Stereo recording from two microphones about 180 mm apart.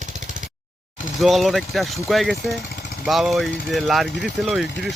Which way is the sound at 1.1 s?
Centre (ahead or behind).